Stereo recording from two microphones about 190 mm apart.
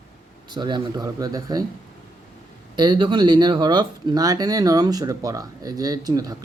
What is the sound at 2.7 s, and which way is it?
Speech, 25° right (ahead or behind).